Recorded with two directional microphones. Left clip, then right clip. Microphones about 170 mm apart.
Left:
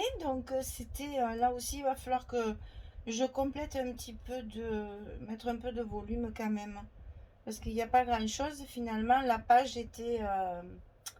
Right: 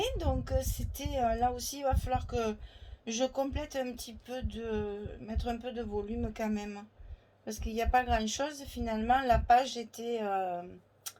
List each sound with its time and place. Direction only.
0.0 s speech: 45° right (ahead or behind)